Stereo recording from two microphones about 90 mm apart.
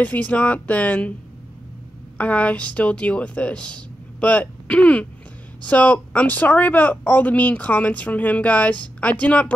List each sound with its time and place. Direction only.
0.0 s speech: 15° left (ahead or behind)
2.1 s speech: 15° left (ahead or behind)